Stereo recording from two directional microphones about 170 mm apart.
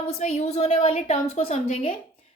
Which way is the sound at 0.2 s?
40° left (ahead or behind).